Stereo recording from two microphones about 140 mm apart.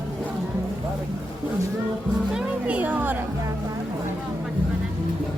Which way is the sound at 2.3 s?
10° right (ahead or behind).